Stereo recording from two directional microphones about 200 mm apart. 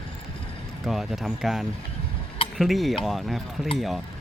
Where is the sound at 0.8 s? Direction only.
Centre (ahead or behind).